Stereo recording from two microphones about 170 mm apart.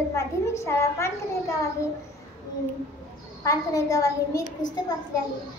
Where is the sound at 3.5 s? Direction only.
20° left (ahead or behind).